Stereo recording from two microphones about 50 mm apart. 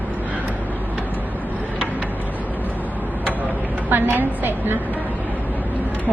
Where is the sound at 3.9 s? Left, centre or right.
Right.